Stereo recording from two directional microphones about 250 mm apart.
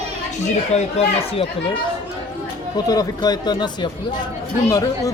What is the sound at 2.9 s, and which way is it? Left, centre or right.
A man's voice, centre.